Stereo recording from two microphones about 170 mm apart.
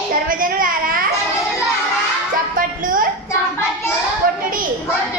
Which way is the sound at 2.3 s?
55° right (ahead or behind).